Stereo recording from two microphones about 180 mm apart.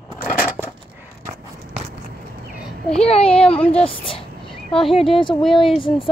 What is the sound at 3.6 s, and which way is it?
Speech, 5° left (ahead or behind).